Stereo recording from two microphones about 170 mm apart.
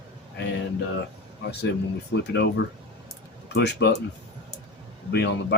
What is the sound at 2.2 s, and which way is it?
Speech, 85° left.